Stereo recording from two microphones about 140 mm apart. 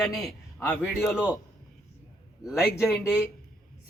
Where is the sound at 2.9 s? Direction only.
15° left (ahead or behind).